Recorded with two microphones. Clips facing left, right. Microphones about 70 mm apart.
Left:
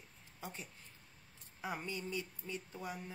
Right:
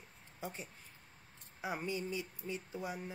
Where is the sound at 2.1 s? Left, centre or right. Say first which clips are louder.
Right 2 dB; centre.